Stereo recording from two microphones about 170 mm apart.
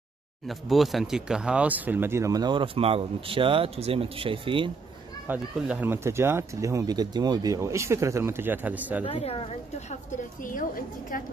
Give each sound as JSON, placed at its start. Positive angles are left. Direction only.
{"t": 0.5, "sound": "speech", "side_deg": 0}
{"t": 5.3, "sound": "speech", "side_deg": -10}
{"t": 9.0, "sound": "a woman's voice", "side_deg": 35}